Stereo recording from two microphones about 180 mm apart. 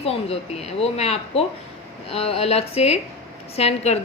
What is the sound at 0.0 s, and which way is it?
A woman's voice, 35° left (ahead or behind).